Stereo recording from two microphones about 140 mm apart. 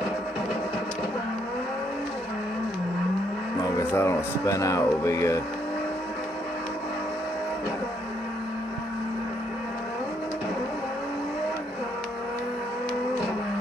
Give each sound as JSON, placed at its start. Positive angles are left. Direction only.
{"t": 3.7, "sound": "speech", "side_deg": 15}